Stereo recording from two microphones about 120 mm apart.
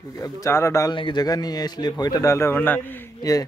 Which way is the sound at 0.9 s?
40° left (ahead or behind).